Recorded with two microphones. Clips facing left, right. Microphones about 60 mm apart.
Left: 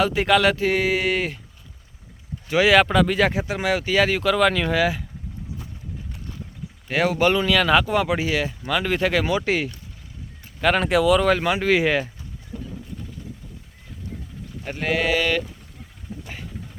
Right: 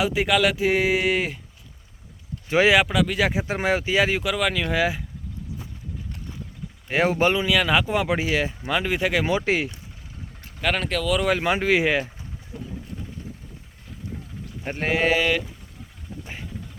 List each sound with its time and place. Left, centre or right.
0.0 s speech: centre
0.6 s speech: centre
2.5 s speech: right
2.7 s speech: centre
3.4 s speech: right; by 4.7 s centre
4.7 s speech: centre
6.9 s speech: right
8.9 s speech: centre
9.2 s speech: right
10.6 s speech: centre
11.6 s speech: centre
14.6 s speech: right
16.2 s vehicle: centre